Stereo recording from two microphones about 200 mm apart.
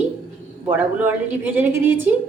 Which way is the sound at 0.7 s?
10° right (ahead or behind).